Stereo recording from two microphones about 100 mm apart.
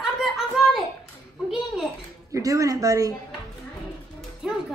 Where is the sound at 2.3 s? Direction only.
35° right (ahead or behind).